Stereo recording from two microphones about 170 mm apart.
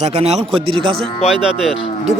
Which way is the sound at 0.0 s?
40° right (ahead or behind).